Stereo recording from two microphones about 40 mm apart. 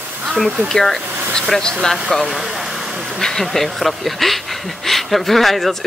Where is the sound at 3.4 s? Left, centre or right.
Centre.